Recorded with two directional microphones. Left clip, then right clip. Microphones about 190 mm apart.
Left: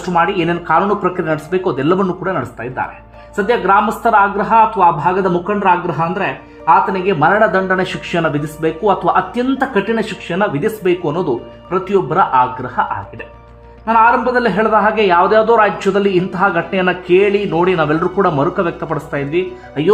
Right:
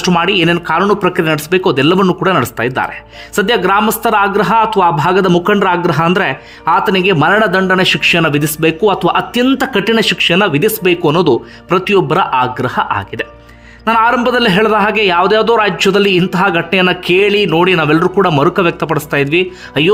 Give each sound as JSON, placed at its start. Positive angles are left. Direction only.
{"t": 0.0, "sound": "a man's voice", "side_deg": -25}
{"t": 13.8, "sound": "a man's voice", "side_deg": -30}